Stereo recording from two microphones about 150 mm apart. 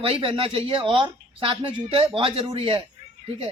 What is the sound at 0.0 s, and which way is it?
A man's voice, 35° right (ahead or behind).